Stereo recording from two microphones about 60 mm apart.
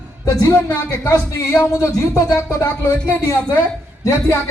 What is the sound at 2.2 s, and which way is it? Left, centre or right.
Speech, left.